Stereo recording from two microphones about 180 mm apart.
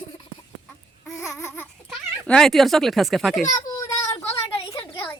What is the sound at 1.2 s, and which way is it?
Babbling, 15° left (ahead or behind).